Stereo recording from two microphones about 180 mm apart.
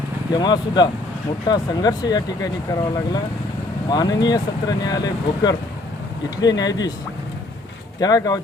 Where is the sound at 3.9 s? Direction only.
25° left (ahead or behind).